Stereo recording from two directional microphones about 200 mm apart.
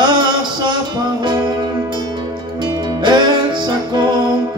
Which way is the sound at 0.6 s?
20° right (ahead or behind).